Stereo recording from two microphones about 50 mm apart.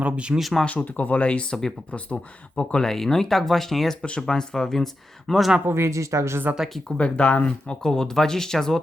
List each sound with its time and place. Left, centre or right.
0.0 s speech: right
0.3 s speech: centre
0.6 s speech: left
2.8 s speech: centre
5.6 s a woman's voice: right
6.9 s speech: left